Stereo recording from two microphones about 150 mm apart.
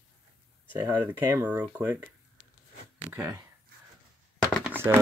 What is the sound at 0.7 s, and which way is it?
Speech, 10° right (ahead or behind).